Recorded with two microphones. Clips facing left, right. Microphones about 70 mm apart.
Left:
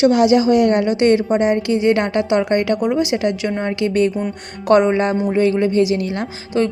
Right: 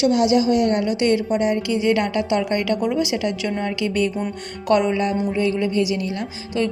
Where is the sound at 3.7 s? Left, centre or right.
Left.